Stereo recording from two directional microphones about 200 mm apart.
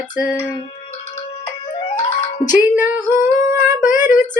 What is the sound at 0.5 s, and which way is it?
Music, 30° left (ahead or behind).